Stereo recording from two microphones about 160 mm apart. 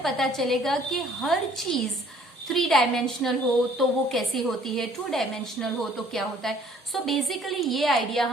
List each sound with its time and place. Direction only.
0.0 s a woman's voice: centre (ahead or behind)
6.9 s a woman's voice: centre (ahead or behind)